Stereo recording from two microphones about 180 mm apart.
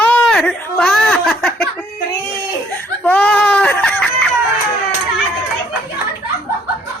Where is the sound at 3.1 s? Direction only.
10° left (ahead or behind).